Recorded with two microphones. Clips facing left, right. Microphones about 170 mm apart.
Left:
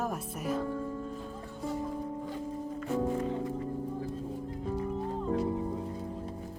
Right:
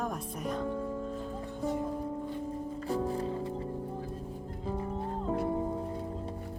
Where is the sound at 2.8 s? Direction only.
35° right (ahead or behind).